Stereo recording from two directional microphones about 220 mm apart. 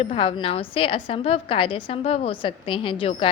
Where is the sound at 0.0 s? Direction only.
25° left (ahead or behind).